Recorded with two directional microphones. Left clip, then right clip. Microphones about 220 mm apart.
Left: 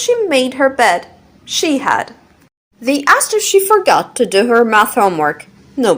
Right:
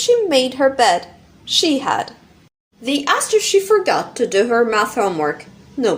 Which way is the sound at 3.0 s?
30° left (ahead or behind).